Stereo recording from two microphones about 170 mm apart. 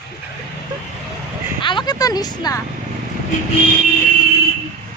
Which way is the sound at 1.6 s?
25° left (ahead or behind).